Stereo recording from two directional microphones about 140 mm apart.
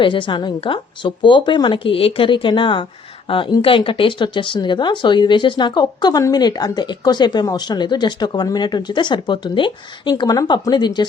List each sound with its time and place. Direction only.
0.0 s speech: 35° left (ahead or behind)